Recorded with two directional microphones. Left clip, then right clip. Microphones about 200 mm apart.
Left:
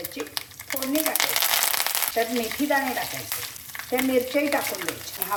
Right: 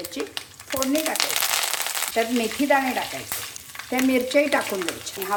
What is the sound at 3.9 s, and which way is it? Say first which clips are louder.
Frying: right 2 dB; 45° right (ahead or behind).